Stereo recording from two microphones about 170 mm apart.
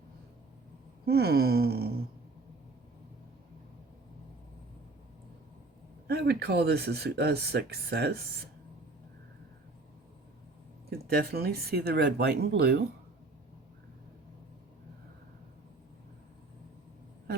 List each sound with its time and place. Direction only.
1.0 s speech: 70° right (ahead or behind)
6.1 s speech: 65° right (ahead or behind)
10.8 s speech: 65° right (ahead or behind)